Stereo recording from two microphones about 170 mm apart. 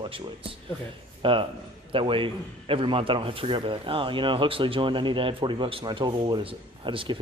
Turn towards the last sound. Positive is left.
turn(degrees=-30)  # may be behind; listen again after turning